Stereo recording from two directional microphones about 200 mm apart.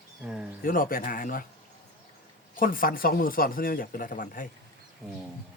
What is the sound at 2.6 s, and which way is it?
Speech, 45° left (ahead or behind).